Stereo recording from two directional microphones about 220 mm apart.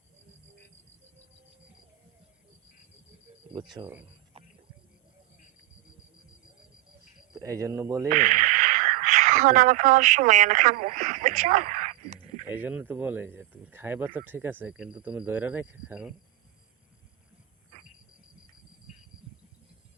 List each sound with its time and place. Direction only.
3.5 s speech: 20° right (ahead or behind)
4.4 s frog: 25° right (ahead or behind)
7.3 s speech: 15° right (ahead or behind)
8.1 s speech: 35° right (ahead or behind)
12.5 s speech: 10° right (ahead or behind)